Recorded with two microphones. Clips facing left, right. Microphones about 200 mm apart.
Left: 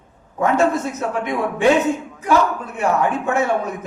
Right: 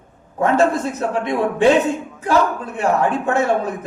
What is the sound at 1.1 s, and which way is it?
Speech, 30° right (ahead or behind).